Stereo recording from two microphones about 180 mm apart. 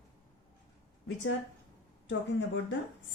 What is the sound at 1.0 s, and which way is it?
Speech, 90° left.